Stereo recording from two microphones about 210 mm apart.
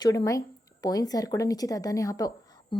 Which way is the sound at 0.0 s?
15° left (ahead or behind).